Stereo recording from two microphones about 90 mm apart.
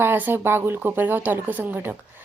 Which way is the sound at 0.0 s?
25° right (ahead or behind).